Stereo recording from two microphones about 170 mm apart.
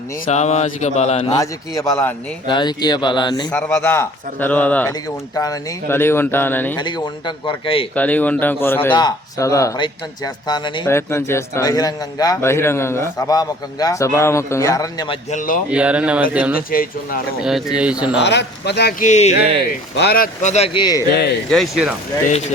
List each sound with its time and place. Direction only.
0.3 s mantra: 40° left (ahead or behind)
1.4 s speech: 15° left (ahead or behind)
3.5 s speech: 10° left (ahead or behind)
6.7 s speech: 25° left (ahead or behind)
7.9 s speech: 10° left (ahead or behind)
15.3 s speech: 50° left (ahead or behind)
15.7 s speech: 5° right (ahead or behind)
18.2 s speech: 90° left; by 19.0 s 70° left (ahead or behind)
19.0 s speech: 45° left (ahead or behind)
20.0 s speech: 65° left (ahead or behind)
20.7 s speech: 25° left (ahead or behind)
21.1 s speech: 80° left
21.5 s speech: centre (ahead or behind)